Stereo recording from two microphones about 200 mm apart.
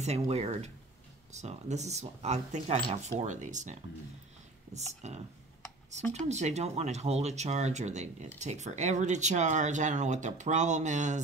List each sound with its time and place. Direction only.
0.0 s speech: 30° right (ahead or behind)